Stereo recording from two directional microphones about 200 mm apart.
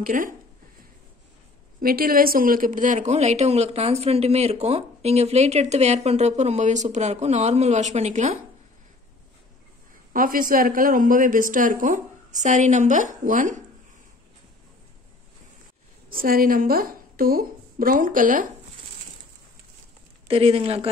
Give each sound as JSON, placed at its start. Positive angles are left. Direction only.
{"t": 0.0, "sound": "speech", "side_deg": -40}
{"t": 1.8, "sound": "speech", "side_deg": -45}
{"t": 10.1, "sound": "speech", "side_deg": -45}
{"t": 16.1, "sound": "a woman's voice", "side_deg": -45}
{"t": 20.2, "sound": "speech", "side_deg": -30}